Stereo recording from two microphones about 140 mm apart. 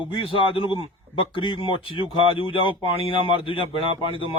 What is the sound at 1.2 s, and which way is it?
A man's voice, 35° left (ahead or behind).